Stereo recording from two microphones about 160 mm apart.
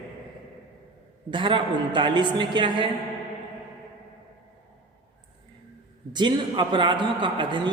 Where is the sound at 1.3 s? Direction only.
30° right (ahead or behind).